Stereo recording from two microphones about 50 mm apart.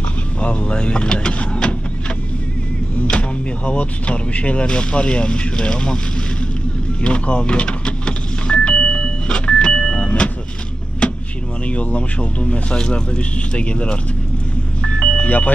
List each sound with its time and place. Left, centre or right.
0.4 s vehicle: left
3.1 s speech: left
7.0 s vehicle: left
11.6 s speech: left
14.8 s vehicle: left
15.2 s speech: left